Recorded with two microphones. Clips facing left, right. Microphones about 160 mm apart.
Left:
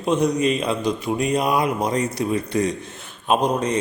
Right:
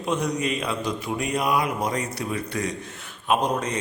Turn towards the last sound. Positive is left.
turn(degrees=20)  # may be behind; listen again after turning